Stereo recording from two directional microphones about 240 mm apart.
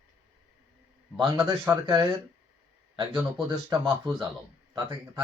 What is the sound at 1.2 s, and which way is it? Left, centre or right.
Speech, centre.